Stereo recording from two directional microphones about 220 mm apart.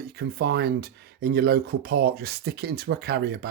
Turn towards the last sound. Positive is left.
turn(degrees=-45)  # may be behind; listen again after turning